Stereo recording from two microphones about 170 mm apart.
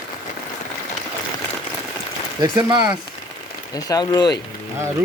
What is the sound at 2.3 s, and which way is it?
Speech, 25° right (ahead or behind).